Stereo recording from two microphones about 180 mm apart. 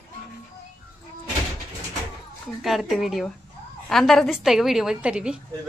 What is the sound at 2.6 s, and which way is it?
A woman's voice, centre (ahead or behind).